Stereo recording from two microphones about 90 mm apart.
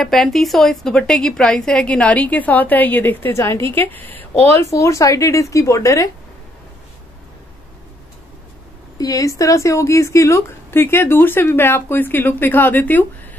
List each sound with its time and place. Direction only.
0.0 s a woman's voice: 5° left (ahead or behind); by 4.4 s 20° left (ahead or behind)
4.6 s speech: 35° left (ahead or behind)
8.9 s speech: 40° left (ahead or behind); by 13.0 s 20° left (ahead or behind)